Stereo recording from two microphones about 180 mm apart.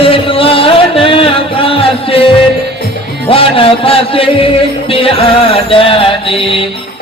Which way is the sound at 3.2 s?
30° left (ahead or behind).